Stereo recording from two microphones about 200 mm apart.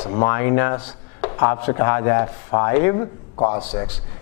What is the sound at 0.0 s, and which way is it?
Speech, 20° left (ahead or behind).